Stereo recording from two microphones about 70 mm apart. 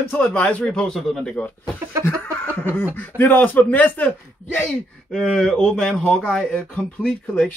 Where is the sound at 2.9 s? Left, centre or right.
Left.